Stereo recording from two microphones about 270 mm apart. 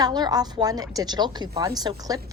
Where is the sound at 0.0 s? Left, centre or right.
Centre.